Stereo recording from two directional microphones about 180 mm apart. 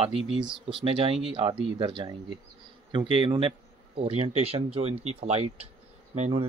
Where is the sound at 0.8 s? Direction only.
30° right (ahead or behind).